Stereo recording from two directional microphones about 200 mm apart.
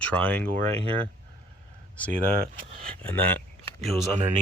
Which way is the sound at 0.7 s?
30° right (ahead or behind).